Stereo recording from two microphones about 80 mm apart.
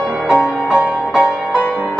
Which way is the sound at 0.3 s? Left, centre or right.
Centre.